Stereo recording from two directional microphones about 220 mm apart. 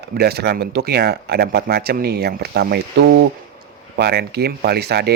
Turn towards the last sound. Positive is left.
turn(degrees=-45)  # may be behind; listen again after turning